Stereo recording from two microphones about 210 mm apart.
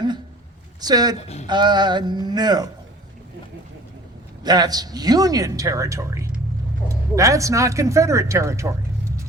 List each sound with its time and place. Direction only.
0.8 s speech: 20° right (ahead or behind)
4.4 s a man's voice: 20° right (ahead or behind)